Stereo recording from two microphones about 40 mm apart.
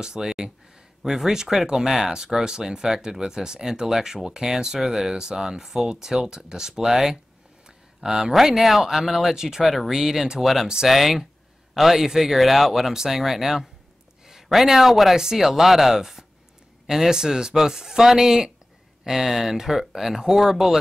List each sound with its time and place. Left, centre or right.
0.0 s speech: centre
7.6 s a sound: centre
8.3 s speech: centre